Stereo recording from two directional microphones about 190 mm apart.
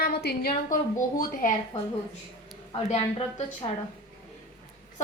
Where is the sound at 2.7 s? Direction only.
30° left (ahead or behind).